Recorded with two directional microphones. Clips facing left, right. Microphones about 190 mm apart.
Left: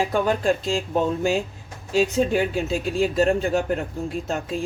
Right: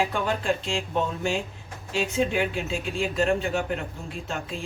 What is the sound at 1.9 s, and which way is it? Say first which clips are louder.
Speech: left 5 dB; 40° left (ahead or behind).